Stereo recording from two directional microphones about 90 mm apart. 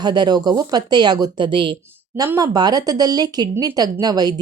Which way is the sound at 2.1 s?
40° right (ahead or behind).